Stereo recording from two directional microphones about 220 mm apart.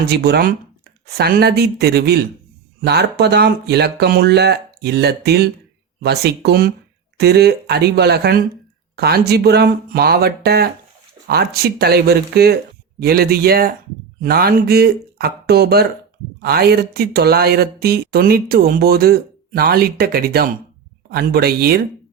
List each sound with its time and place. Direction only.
0.0 s speech: 50° right (ahead or behind)